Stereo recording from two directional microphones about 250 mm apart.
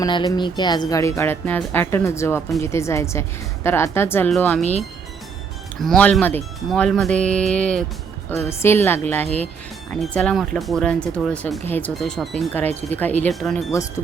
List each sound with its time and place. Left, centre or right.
0.0 s a woman's voice: centre
5.8 s a woman's voice: centre
13.7 s a woman's voice: centre